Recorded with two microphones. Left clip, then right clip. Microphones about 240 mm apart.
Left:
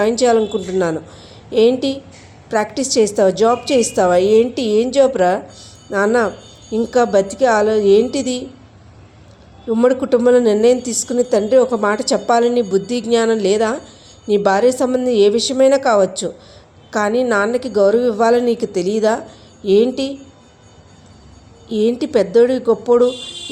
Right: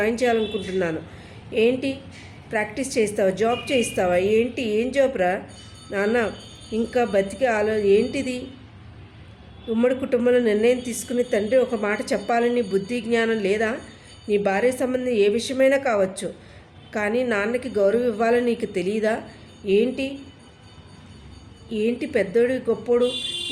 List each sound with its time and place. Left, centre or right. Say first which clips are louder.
0.0 s a woman's voice: left 7 dB; left
1.5 s a woman's voice: left 7 dB; left
9.6 s a woman's voice: left 7 dB; centre
21.7 s a woman's voice: left 8 dB; left